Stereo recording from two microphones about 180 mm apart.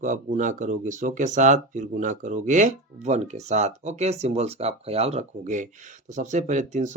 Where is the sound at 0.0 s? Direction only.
45° right (ahead or behind).